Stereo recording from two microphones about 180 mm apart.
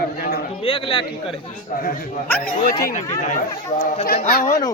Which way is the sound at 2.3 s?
10° left (ahead or behind).